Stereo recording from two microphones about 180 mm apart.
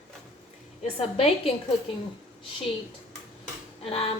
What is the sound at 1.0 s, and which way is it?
Speech, 35° left (ahead or behind).